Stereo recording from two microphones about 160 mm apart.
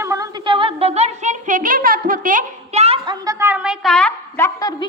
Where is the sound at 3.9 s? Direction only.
10° left (ahead or behind).